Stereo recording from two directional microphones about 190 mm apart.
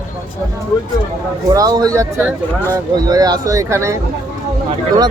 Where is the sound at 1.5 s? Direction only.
20° right (ahead or behind).